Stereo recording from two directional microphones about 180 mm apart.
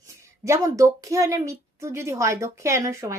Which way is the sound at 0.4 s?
15° right (ahead or behind).